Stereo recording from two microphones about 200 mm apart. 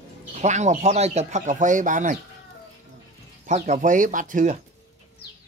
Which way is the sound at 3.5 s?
40° right (ahead or behind).